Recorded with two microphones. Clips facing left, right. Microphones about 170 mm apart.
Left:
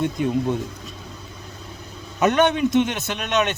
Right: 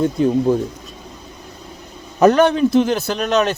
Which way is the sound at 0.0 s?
35° right (ahead or behind).